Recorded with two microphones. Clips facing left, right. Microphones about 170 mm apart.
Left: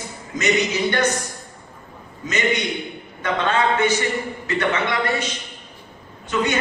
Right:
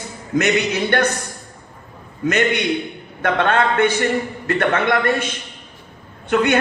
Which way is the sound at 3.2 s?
60° right (ahead or behind).